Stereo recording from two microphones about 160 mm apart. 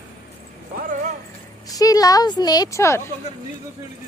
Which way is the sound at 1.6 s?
20° left (ahead or behind).